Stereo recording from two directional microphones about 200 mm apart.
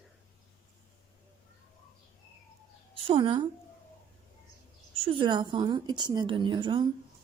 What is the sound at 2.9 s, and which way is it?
Speech, 25° right (ahead or behind).